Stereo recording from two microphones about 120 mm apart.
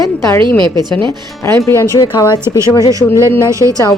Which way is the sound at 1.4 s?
20° left (ahead or behind).